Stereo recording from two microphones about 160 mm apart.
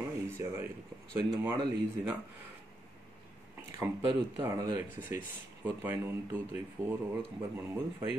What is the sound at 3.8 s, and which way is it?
Speech, 20° right (ahead or behind).